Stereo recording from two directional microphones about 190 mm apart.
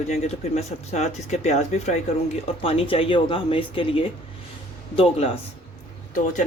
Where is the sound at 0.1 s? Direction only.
35° left (ahead or behind).